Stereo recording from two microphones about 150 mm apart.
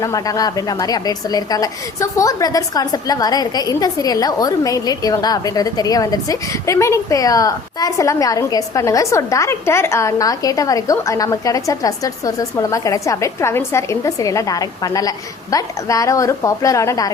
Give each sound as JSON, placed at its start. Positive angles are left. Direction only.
{"t": 0.0, "sound": "a woman's voice", "side_deg": 25}